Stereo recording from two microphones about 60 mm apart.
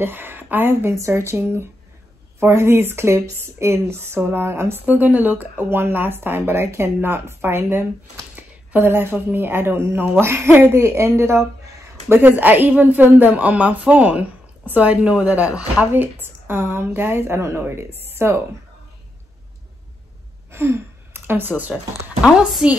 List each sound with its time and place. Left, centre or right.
0.0 s speech: right
0.9 s speech: right
4.8 s a woman's voice: right
12.2 s speech: right
15.9 s speech: right
20.5 s a sound: right
22.6 s a woman's voice: centre